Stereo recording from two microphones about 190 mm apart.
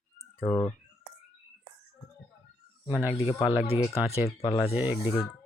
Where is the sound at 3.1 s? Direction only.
25° left (ahead or behind).